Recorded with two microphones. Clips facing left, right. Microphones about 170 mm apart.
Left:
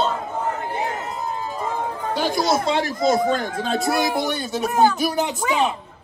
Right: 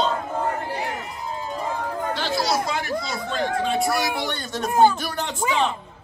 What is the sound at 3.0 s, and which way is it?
Speech, 45° left (ahead or behind).